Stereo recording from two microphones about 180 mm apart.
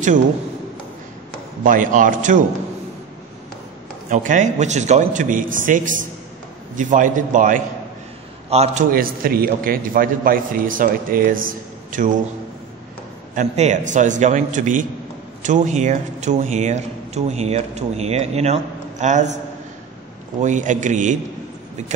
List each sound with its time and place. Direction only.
1.6 s a man's voice: 45° right (ahead or behind)
4.1 s a man's voice: 45° right (ahead or behind)
8.5 s speech: 35° right (ahead or behind)
8.9 s a man's voice: 55° right (ahead or behind)
13.3 s a man's voice: 40° right (ahead or behind)